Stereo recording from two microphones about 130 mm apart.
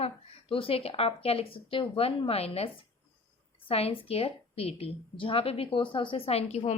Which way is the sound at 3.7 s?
45° left (ahead or behind).